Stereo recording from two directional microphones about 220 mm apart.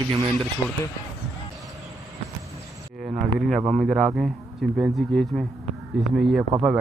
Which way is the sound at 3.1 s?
30° right (ahead or behind).